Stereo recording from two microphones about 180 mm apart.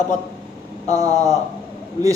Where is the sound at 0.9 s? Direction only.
20° right (ahead or behind).